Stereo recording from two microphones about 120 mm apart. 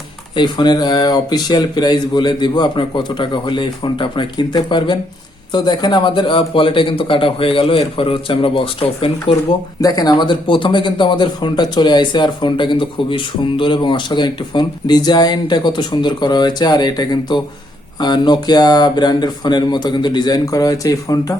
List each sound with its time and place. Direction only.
0.3 s speech: 40° left (ahead or behind)
9.8 s speech: 35° left (ahead or behind)